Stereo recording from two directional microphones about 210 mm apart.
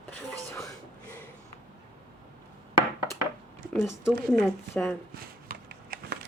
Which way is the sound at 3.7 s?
10° left (ahead or behind).